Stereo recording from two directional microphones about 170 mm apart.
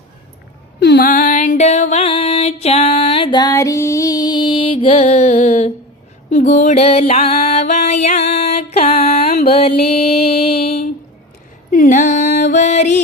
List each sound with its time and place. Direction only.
0.8 s music: 70° left (ahead or behind); by 10.3 s 35° left (ahead or behind)
10.4 s a sound: 35° left (ahead or behind)
11.7 s music: 50° left (ahead or behind)